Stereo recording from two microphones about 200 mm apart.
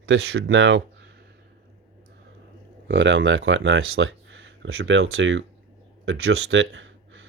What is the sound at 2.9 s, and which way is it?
Speech, 70° right (ahead or behind).